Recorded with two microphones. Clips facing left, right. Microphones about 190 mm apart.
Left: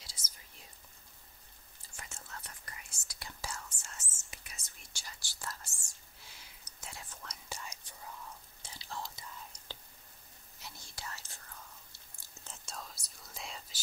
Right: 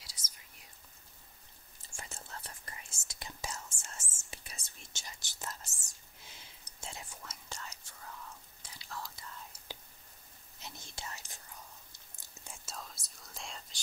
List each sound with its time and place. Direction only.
1.9 s whispering: 30° right (ahead or behind)
6.2 s a sound: 25° right (ahead or behind)
7.4 s whispering: 10° left (ahead or behind)
8.6 s whispering: 25° left (ahead or behind)
10.6 s whispering: 20° right (ahead or behind)
12.6 s whispering: centre (ahead or behind)